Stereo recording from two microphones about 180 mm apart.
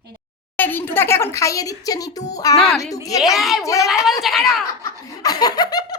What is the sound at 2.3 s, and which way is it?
Laughter, 20° left (ahead or behind).